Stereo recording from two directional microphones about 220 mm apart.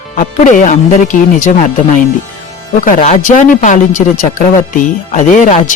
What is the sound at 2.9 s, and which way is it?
Speech, 35° left (ahead or behind).